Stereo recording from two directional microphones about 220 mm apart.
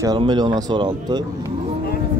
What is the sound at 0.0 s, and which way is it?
Speech, 20° right (ahead or behind).